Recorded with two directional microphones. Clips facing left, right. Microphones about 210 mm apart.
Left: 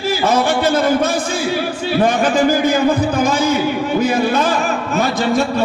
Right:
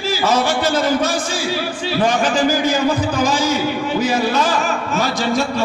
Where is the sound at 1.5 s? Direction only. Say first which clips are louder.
Left 3 dB; 55° left (ahead or behind).